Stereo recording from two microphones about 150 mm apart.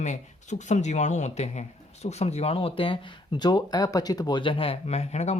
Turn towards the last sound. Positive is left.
turn(degrees=45)  # may be behind; listen again after turning